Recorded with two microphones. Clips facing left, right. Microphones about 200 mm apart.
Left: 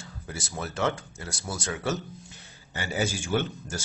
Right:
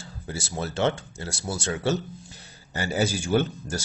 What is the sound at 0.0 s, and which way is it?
Speech, 30° right (ahead or behind).